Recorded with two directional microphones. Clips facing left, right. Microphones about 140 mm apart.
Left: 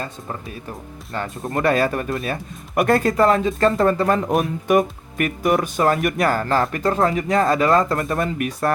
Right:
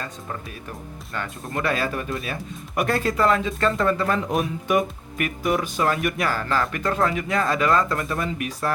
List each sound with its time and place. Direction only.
0.0 s speech: 30° left (ahead or behind); by 8.7 s 50° left (ahead or behind)